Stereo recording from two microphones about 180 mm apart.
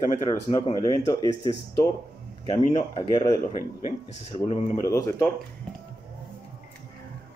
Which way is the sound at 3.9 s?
35° left (ahead or behind).